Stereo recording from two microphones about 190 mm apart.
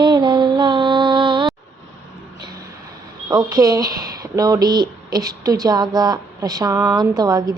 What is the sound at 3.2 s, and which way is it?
A woman's voice, 20° right (ahead or behind).